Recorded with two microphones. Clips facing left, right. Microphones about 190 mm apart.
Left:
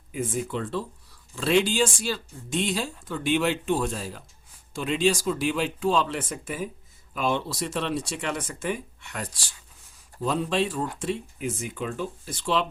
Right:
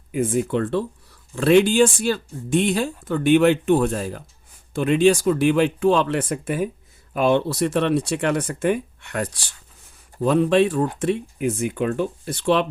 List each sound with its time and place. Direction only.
0.1 s speech: 60° right (ahead or behind)